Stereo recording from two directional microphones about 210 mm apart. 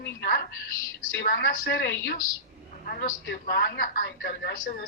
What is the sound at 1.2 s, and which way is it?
A woman's voice, 45° left (ahead or behind).